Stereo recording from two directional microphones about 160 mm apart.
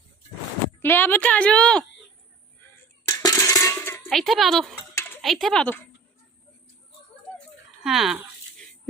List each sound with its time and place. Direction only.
0.8 s a woman's voice: 15° left (ahead or behind)
3.1 s coin: 20° left (ahead or behind)
4.1 s speech: centre (ahead or behind)
4.7 s a sound: 10° left (ahead or behind)
5.2 s speech: centre (ahead or behind)
7.9 s a sound: centre (ahead or behind)